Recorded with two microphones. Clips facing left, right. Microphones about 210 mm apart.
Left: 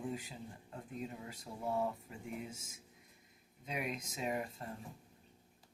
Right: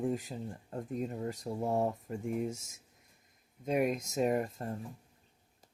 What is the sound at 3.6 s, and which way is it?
Speech, 45° right (ahead or behind).